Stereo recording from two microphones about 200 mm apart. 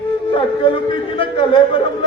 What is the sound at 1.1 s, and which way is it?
Speech, 25° left (ahead or behind).